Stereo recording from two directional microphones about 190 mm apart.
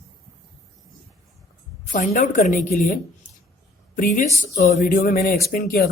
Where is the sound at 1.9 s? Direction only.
40° left (ahead or behind).